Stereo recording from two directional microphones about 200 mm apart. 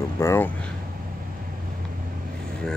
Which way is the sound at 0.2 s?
15° left (ahead or behind).